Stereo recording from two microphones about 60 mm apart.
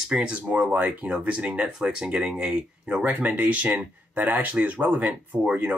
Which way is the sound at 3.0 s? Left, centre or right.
Right.